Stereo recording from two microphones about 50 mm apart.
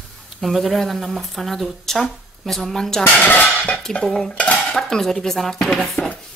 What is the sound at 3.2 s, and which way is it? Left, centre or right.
Dishes, left.